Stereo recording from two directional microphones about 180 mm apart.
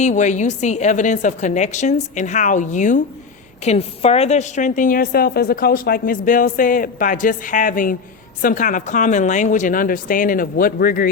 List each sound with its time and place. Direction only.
0.0 s a woman's voice: 40° left (ahead or behind)